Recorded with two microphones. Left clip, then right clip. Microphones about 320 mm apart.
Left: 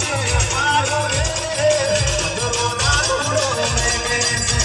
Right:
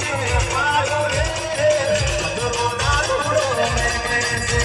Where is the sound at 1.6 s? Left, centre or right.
Right.